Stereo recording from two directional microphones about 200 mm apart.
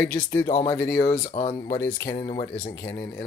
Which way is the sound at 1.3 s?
30° left (ahead or behind).